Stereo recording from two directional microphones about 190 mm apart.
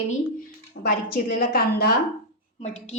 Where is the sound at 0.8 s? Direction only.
50° left (ahead or behind).